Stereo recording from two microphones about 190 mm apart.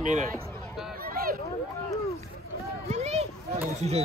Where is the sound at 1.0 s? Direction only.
50° right (ahead or behind).